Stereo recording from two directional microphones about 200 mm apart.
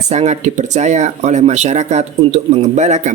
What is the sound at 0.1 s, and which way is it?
Speech, 35° right (ahead or behind).